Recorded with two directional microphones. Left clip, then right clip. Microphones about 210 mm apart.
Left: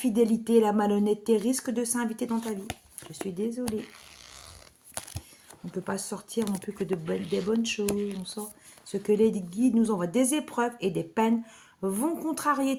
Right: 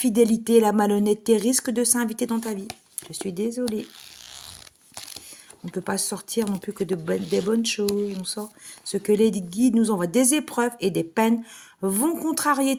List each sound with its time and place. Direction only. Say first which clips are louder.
0.0 s a woman's voice: right 5 dB; 40° right (ahead or behind)
5.7 s a woman's voice: right 5 dB; 40° right (ahead or behind)